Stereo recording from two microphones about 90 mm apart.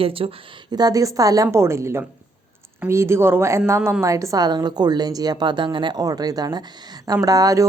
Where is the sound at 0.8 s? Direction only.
45° right (ahead or behind).